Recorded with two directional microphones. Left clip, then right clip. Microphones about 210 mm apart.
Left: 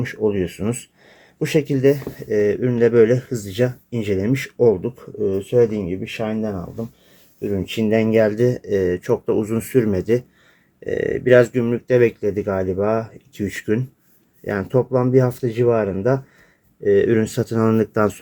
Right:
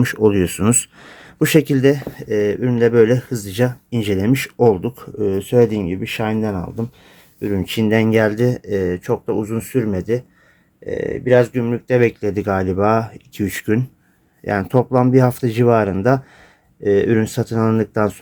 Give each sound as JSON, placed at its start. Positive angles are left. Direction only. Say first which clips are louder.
{"t": 0.0, "sound": "speech", "louder": "right 5 dB", "side_deg": -40}
{"t": 2.3, "sound": "speech", "louder": "even", "side_deg": -10}
{"t": 7.4, "sound": "speech", "louder": "right 2 dB", "side_deg": -20}